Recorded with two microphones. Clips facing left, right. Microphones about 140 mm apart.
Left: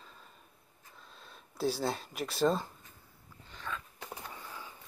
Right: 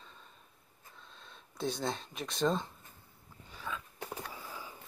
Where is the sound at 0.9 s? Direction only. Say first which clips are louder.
Left 1 dB; 5° left (ahead or behind).